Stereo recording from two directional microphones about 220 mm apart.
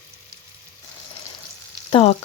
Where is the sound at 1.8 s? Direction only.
25° left (ahead or behind).